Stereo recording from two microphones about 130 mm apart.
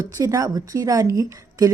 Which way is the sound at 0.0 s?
25° right (ahead or behind).